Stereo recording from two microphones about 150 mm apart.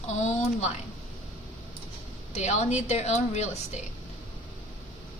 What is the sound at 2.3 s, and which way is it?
Speech, 50° left (ahead or behind).